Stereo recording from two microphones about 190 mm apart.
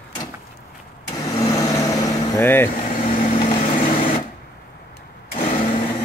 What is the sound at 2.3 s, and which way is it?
Speech, 10° left (ahead or behind).